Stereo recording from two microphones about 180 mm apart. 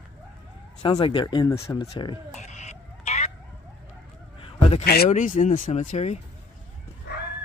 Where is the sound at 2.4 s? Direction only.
40° left (ahead or behind).